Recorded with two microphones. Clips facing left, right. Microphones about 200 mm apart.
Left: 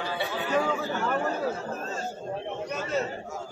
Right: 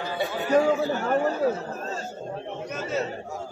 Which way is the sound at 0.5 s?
40° right (ahead or behind).